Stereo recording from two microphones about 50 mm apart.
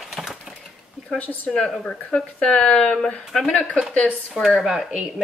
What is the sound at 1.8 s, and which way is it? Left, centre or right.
Speech, centre.